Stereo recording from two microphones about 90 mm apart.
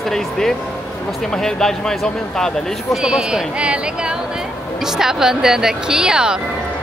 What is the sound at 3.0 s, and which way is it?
A woman's voice, 5° right (ahead or behind).